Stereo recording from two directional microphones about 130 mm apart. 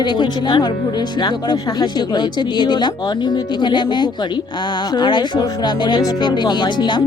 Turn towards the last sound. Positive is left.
turn(degrees=35)  # may be behind; listen again after turning